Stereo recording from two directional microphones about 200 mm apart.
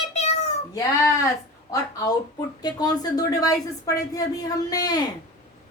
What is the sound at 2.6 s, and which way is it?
Speech, 20° left (ahead or behind).